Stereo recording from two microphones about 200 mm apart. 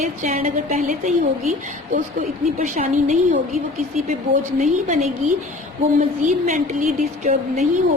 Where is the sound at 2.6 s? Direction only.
40° right (ahead or behind).